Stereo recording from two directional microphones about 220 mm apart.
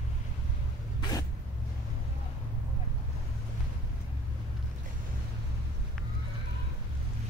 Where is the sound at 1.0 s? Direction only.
15° left (ahead or behind).